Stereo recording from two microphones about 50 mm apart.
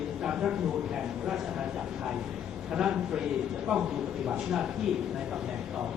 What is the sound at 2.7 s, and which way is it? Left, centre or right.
A man's voice, centre.